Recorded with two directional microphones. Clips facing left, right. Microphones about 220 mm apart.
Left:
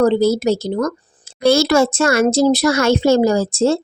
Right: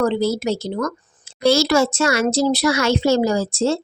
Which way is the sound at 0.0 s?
40° left (ahead or behind).